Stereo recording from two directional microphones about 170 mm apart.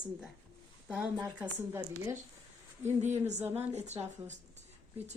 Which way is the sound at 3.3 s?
15° right (ahead or behind).